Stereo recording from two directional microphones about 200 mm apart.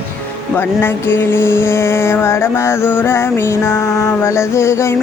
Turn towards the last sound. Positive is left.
turn(degrees=15)  # may be behind; listen again after turning